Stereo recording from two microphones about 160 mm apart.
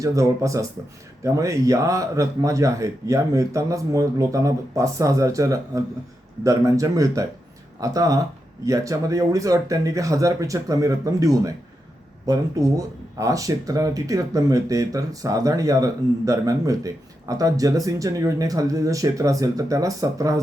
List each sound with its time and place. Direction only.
0.0 s speech: 20° right (ahead or behind)